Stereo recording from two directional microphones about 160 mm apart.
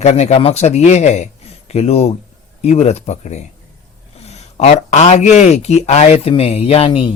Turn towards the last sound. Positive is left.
turn(degrees=35)  # may be behind; listen again after turning